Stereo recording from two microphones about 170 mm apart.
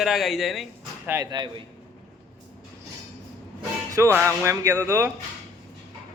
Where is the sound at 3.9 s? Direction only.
15° right (ahead or behind).